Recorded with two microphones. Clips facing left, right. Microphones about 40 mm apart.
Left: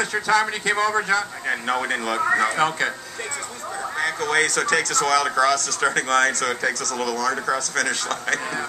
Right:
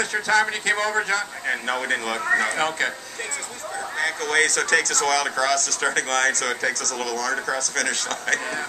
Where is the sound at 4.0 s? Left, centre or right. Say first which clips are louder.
Even; left.